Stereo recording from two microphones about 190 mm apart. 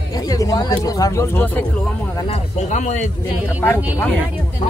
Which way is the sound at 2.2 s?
35° left (ahead or behind).